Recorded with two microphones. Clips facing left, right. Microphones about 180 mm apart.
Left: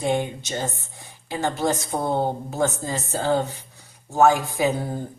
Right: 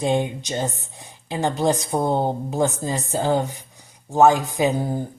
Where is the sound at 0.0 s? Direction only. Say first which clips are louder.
Right 2 dB; 20° right (ahead or behind).